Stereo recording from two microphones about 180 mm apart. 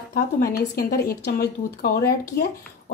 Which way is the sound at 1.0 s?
60° left (ahead or behind).